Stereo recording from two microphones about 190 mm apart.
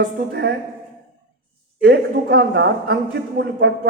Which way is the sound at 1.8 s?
60° right (ahead or behind).